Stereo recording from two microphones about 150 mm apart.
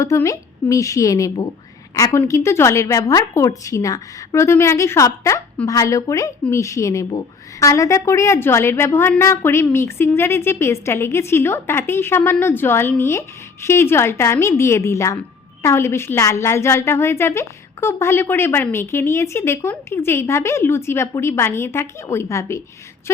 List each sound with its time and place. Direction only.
0.0 s a woman's voice: 20° left (ahead or behind)